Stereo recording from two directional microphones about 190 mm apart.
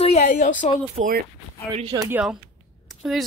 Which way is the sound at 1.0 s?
45° right (ahead or behind).